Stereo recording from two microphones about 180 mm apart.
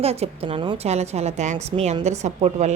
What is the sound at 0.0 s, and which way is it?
Speech, 35° right (ahead or behind).